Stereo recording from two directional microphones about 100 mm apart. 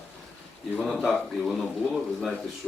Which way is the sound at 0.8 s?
Centre (ahead or behind).